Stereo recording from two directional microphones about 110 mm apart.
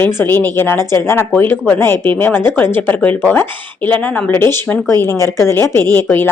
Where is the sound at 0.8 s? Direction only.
35° right (ahead or behind).